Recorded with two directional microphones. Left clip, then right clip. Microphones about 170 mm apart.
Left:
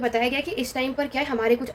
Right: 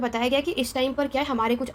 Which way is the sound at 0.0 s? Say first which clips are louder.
Even; 40° right (ahead or behind).